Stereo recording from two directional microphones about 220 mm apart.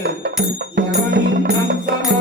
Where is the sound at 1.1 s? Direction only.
45° right (ahead or behind).